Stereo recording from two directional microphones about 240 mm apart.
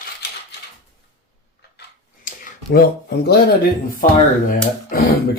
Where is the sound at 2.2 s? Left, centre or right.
Left.